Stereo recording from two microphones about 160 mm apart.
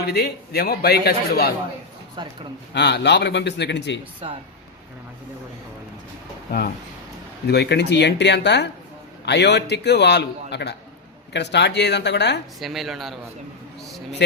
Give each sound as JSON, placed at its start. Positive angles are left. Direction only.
{"t": 0.0, "sound": "a man's voice", "side_deg": 85}
{"t": 2.2, "sound": "a man's voice", "side_deg": -30}
{"t": 2.7, "sound": "a man's voice", "side_deg": 90}
{"t": 7.4, "sound": "a man's voice", "side_deg": 90}
{"t": 12.5, "sound": "a woman's voice", "side_deg": 0}